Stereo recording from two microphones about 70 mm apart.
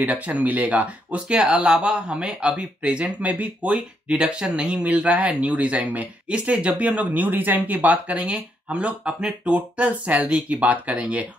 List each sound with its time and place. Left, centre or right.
0.0 s speech: right